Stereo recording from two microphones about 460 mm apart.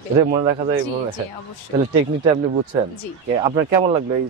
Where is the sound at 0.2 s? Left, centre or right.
Centre.